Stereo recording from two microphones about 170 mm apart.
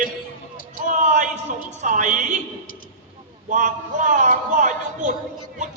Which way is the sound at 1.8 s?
50° right (ahead or behind).